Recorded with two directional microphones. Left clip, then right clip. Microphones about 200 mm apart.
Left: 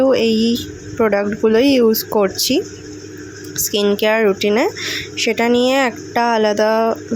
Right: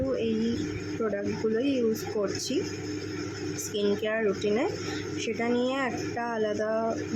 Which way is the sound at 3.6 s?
45° left (ahead or behind).